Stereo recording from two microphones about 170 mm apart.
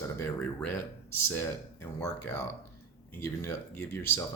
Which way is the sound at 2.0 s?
15° left (ahead or behind).